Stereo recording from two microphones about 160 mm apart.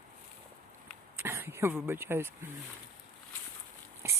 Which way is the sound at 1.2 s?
15° right (ahead or behind).